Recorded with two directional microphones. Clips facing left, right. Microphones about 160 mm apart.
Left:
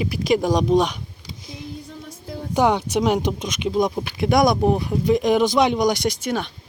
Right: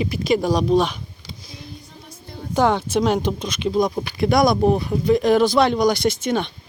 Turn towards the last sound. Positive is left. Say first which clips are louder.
# right 3 dB
turn(degrees=5)  # may be behind; listen again after turning